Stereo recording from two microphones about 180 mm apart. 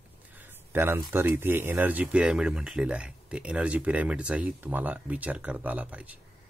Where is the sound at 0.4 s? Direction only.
10° right (ahead or behind).